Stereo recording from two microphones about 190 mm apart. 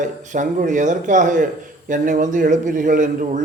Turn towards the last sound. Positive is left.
turn(degrees=-45)  # may be behind; listen again after turning